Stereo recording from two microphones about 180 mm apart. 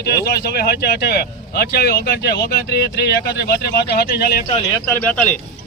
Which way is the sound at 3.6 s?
65° left (ahead or behind).